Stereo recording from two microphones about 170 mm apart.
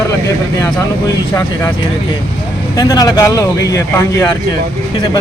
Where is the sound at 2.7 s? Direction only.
20° left (ahead or behind).